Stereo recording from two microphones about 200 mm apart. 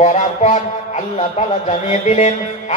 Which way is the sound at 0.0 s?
35° left (ahead or behind).